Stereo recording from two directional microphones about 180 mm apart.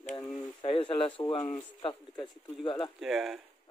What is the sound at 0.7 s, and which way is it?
Speech, 30° left (ahead or behind).